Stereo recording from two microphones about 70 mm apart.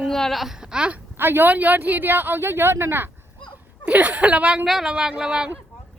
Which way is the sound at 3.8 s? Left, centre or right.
Centre.